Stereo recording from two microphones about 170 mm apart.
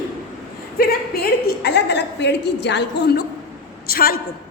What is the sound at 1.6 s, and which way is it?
A woman's voice, 80° left.